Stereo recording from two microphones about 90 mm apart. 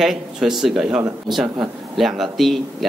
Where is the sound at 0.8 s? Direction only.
10° right (ahead or behind).